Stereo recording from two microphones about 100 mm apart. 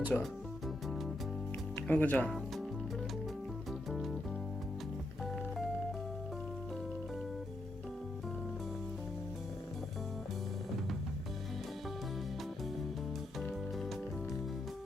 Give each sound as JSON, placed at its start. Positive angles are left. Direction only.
{"t": 0.1, "sound": "speech", "side_deg": 10}
{"t": 1.7, "sound": "speech", "side_deg": 15}
{"t": 3.7, "sound": "music", "side_deg": 0}
{"t": 13.4, "sound": "music", "side_deg": 5}